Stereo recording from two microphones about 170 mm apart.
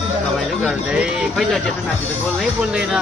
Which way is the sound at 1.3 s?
5° left (ahead or behind).